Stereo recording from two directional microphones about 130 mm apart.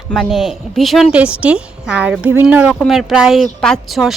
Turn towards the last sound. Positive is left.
turn(degrees=0)  # may be behind; listen again after turning